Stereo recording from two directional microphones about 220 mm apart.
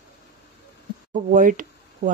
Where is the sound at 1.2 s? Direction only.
35° right (ahead or behind).